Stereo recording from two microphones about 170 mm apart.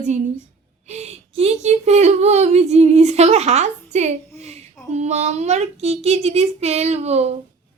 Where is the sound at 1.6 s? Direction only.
40° right (ahead or behind).